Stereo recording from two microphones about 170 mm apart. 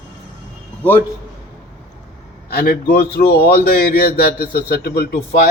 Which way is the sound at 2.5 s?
60° left (ahead or behind).